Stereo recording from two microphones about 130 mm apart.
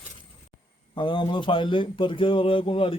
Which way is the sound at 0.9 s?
40° left (ahead or behind).